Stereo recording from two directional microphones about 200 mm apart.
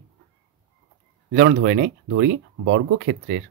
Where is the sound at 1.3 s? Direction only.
50° right (ahead or behind).